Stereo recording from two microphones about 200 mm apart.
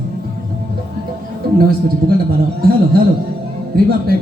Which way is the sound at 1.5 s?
50° right (ahead or behind).